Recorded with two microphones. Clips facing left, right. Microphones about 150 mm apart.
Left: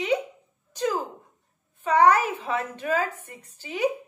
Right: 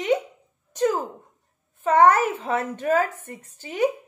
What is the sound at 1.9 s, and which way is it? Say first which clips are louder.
Speech: right 2 dB; 50° right (ahead or behind).